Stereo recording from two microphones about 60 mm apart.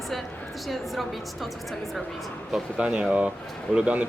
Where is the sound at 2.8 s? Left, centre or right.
Centre.